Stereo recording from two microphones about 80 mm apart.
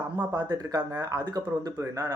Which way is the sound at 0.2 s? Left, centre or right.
Right.